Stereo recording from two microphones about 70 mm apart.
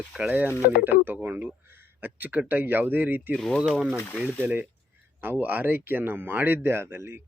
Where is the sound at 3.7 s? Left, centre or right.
Centre.